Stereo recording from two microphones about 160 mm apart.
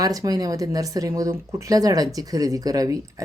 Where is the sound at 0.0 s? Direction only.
20° right (ahead or behind).